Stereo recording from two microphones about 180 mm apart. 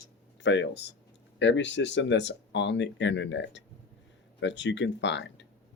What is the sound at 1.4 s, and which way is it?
Speech, 85° left.